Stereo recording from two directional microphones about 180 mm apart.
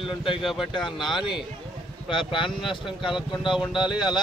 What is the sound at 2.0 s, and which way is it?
A man's voice, 30° left (ahead or behind).